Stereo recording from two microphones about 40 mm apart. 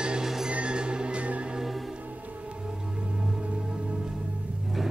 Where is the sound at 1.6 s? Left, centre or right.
Centre.